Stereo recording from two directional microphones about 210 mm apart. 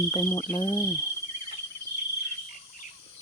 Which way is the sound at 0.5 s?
20° left (ahead or behind).